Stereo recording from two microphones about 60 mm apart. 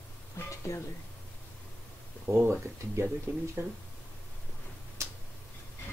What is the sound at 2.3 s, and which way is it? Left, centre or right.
Speech, right.